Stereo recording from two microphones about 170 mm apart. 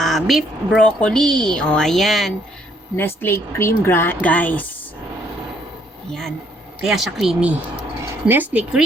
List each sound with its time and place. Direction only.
0.0 s a woman's voice: centre (ahead or behind)
2.9 s speech: 10° left (ahead or behind)
6.1 s a woman's voice: 5° left (ahead or behind)